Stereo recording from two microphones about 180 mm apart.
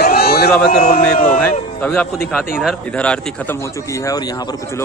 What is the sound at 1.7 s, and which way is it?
Speech, 10° left (ahead or behind).